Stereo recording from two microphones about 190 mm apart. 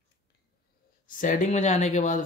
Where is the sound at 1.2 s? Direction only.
45° left (ahead or behind).